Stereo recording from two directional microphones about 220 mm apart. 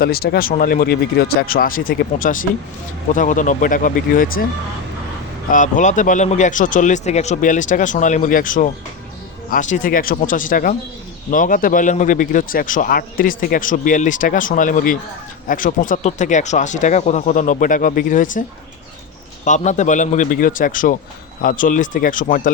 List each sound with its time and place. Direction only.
0.0 s speech: 45° left (ahead or behind)
5.5 s speech: 35° left (ahead or behind)
19.5 s speech: 35° left (ahead or behind)